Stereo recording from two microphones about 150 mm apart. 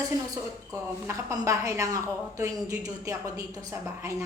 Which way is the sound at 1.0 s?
20° right (ahead or behind).